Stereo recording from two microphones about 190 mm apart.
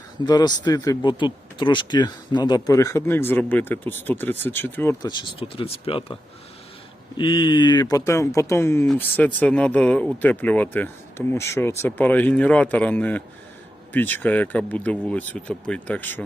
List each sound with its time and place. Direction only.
0.3 s speech: 20° left (ahead or behind)
5.0 s speech: 25° left (ahead or behind)
7.2 s speech: 25° left (ahead or behind)